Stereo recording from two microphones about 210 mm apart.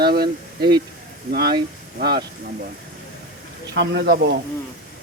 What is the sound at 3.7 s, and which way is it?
Speech, 55° right (ahead or behind).